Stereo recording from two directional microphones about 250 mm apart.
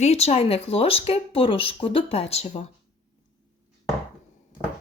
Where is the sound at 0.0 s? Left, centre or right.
Left.